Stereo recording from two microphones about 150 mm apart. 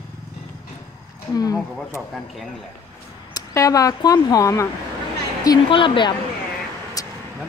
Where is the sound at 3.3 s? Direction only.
20° left (ahead or behind).